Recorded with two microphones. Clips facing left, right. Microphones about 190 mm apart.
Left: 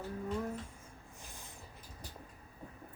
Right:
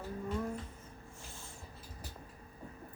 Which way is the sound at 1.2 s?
15° left (ahead or behind).